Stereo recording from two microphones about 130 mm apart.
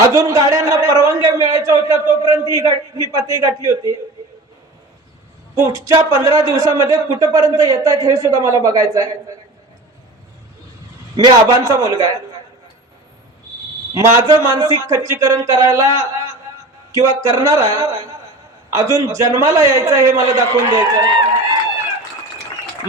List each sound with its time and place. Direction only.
0.1 s a man's voice: 25° right (ahead or behind)
5.5 s a man's voice: 25° right (ahead or behind)
11.2 s a man's voice: 25° right (ahead or behind)
13.9 s a man's voice: 25° right (ahead or behind)